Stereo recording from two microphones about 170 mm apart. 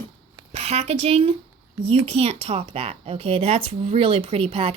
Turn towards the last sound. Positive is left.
turn(degrees=-35)  # may be behind; listen again after turning